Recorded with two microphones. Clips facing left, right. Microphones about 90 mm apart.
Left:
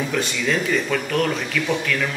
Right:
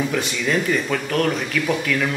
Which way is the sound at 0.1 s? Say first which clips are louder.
Right 1 dB; 5° right (ahead or behind).